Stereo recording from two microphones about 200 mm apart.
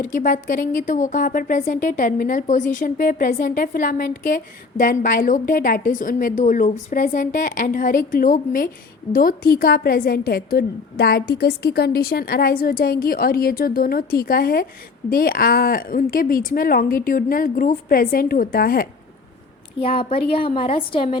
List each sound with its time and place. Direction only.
0.0 s speech: 40° left (ahead or behind)
19.8 s a woman's voice: 25° left (ahead or behind)